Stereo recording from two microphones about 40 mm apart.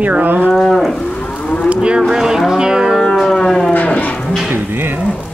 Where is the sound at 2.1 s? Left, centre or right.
Centre.